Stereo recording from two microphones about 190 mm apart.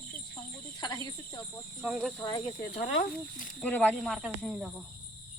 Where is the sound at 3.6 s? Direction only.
5° left (ahead or behind).